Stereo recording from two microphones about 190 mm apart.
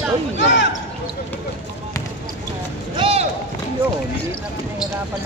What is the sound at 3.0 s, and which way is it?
Run, 30° right (ahead or behind).